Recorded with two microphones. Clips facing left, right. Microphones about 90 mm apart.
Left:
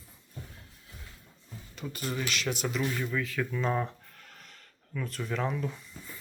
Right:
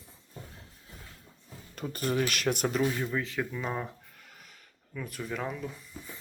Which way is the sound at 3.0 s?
25° right (ahead or behind).